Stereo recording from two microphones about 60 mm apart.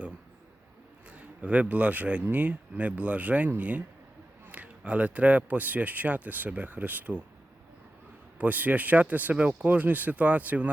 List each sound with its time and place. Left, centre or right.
1.1 s a man's voice: right
8.4 s speech: right